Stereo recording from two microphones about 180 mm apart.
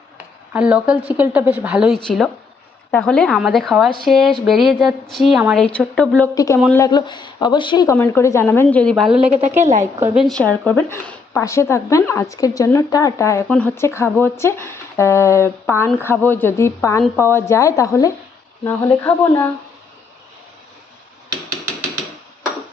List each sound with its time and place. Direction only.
0.5 s a woman's voice: 5° right (ahead or behind)
6.3 s speech: 20° left (ahead or behind)
7.9 s speech: 10° left (ahead or behind)
9.2 s a woman's voice: 40° right (ahead or behind)
10.2 s speech: 5° left (ahead or behind)